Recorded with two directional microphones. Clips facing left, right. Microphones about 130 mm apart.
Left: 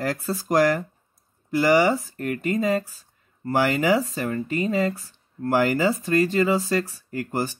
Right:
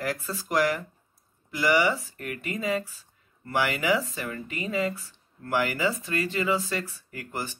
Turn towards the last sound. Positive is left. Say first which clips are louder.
# left 8 dB
turn(degrees=40)  # may be behind; listen again after turning